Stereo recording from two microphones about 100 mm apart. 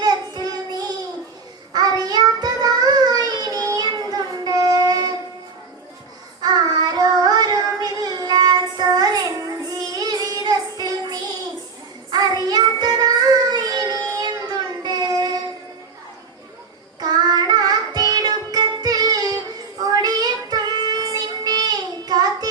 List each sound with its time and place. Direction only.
0.0 s child singing: 45° right (ahead or behind)
6.4 s child singing: 40° right (ahead or behind)
17.0 s music: 45° right (ahead or behind)
19.8 s child singing: 40° right (ahead or behind)